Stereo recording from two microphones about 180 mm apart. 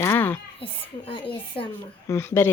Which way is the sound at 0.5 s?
30° left (ahead or behind).